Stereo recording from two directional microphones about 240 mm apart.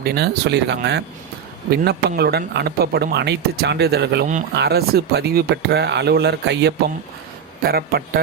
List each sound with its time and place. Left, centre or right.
0.0 s a man's voice: right